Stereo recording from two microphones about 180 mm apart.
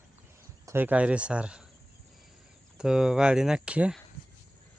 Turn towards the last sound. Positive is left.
turn(degrees=-5)  # may be behind; listen again after turning